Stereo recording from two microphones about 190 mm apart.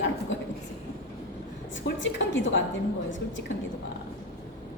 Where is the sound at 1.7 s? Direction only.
75° left (ahead or behind).